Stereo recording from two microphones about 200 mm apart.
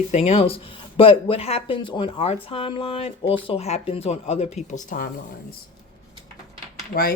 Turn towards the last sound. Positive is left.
turn(degrees=55)  # may be behind; listen again after turning